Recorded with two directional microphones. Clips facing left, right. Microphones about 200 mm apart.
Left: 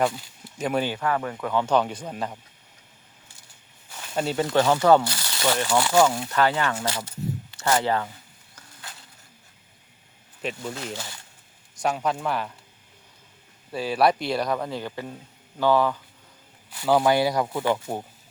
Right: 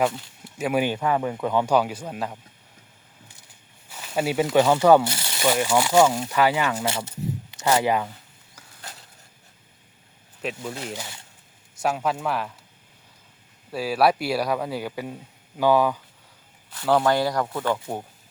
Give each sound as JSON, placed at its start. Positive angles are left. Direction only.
{"t": 0.0, "sound": "a man's voice", "side_deg": 0}
{"t": 0.6, "sound": "speech", "side_deg": -10}
{"t": 3.8, "sound": "speech", "side_deg": -5}
{"t": 5.0, "sound": "speech", "side_deg": -25}
{"t": 6.8, "sound": "speech", "side_deg": -25}
{"t": 10.4, "sound": "a man's voice", "side_deg": 0}
{"t": 10.9, "sound": "speech", "side_deg": -15}
{"t": 11.8, "sound": "a man's voice", "side_deg": -5}
{"t": 13.7, "sound": "speech", "side_deg": -5}
{"t": 16.7, "sound": "speech", "side_deg": 5}